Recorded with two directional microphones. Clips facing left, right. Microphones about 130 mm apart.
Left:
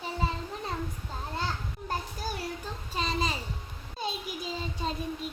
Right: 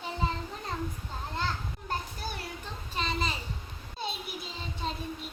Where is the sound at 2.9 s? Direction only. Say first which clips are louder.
Left 2 dB; 40° left (ahead or behind).